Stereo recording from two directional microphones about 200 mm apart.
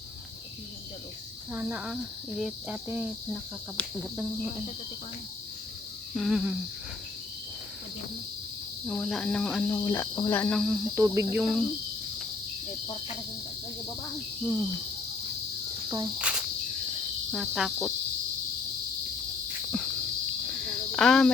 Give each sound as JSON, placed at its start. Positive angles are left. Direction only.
{"t": 1.5, "sound": "speech", "side_deg": -5}
{"t": 3.8, "sound": "speech", "side_deg": 5}
{"t": 6.1, "sound": "speech", "side_deg": 0}
{"t": 8.9, "sound": "speech", "side_deg": 0}
{"t": 9.6, "sound": "speech", "side_deg": 10}
{"t": 10.6, "sound": "speech", "side_deg": -10}
{"t": 15.9, "sound": "speech", "side_deg": -15}
{"t": 16.1, "sound": "cricket", "side_deg": -5}
{"t": 17.3, "sound": "speech", "side_deg": 0}
{"t": 19.7, "sound": "cricket", "side_deg": 0}